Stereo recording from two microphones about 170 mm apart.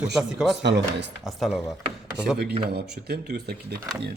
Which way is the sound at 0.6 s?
90° right.